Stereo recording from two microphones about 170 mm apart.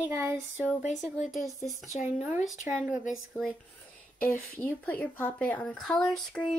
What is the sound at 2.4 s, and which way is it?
Speech, 5° right (ahead or behind).